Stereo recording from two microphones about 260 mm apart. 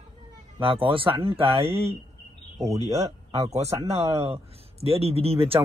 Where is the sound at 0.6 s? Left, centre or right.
Centre.